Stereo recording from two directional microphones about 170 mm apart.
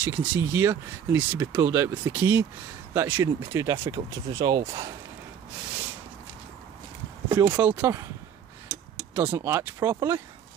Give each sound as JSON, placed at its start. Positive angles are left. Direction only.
{"t": 0.0, "sound": "speech", "side_deg": -10}
{"t": 7.2, "sound": "speech", "side_deg": -10}
{"t": 9.1, "sound": "speech", "side_deg": -10}